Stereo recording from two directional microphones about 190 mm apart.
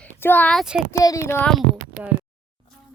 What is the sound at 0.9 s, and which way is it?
Speech, 15° left (ahead or behind).